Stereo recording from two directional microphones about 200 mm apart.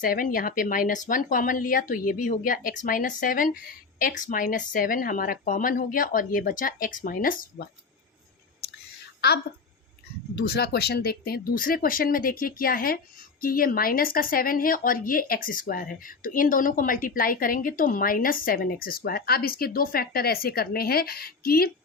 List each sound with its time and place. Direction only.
0.0 s speech: 45° left (ahead or behind)
10.3 s speech: 50° left (ahead or behind)